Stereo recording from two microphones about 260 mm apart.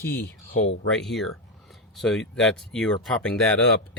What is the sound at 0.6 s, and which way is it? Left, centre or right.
Speech, left.